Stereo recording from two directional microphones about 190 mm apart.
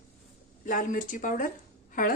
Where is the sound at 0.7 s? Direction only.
45° left (ahead or behind).